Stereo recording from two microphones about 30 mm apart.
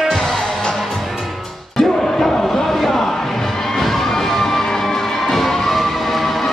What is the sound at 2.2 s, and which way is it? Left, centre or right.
Music, centre.